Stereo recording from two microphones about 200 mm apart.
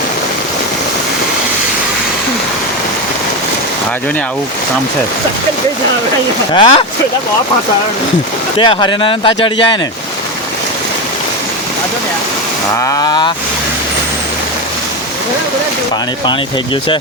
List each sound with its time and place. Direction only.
6.5 s speech: 25° left (ahead or behind)
8.5 s speech: 25° left (ahead or behind)
12.8 s speech: 15° left (ahead or behind)